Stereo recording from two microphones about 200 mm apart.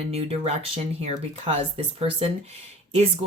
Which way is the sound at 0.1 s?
30° right (ahead or behind).